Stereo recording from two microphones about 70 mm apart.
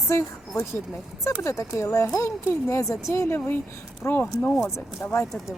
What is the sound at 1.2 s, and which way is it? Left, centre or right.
Speech, left.